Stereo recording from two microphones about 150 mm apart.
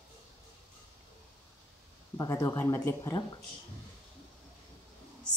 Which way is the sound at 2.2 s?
20° left (ahead or behind).